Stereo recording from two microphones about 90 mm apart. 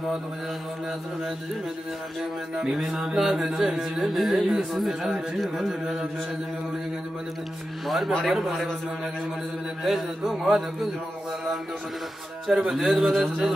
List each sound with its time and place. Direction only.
2.5 s music: 5° right (ahead or behind)
7.8 s music: centre (ahead or behind)
12.4 s music: 5° right (ahead or behind)